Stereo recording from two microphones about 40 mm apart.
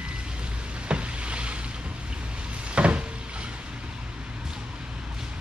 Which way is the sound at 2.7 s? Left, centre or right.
Right.